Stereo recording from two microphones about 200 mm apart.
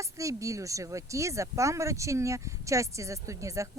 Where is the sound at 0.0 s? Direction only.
15° right (ahead or behind).